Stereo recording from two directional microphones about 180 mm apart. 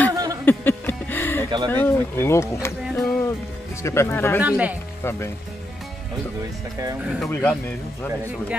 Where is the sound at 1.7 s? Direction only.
10° left (ahead or behind).